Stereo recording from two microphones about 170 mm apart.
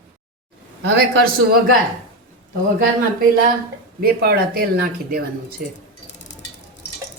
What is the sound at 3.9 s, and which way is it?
Speech, 65° right (ahead or behind).